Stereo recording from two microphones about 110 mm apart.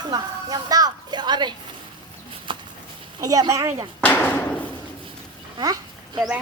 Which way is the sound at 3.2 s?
30° right (ahead or behind).